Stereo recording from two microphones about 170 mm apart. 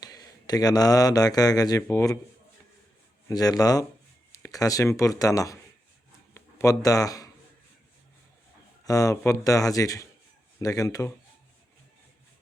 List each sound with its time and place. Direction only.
0.0 s speech: 20° left (ahead or behind)
3.2 s speech: 20° left (ahead or behind)
8.8 s speech: 20° left (ahead or behind)